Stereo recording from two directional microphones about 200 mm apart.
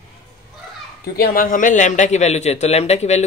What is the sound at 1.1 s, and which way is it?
A man's voice, 45° left (ahead or behind).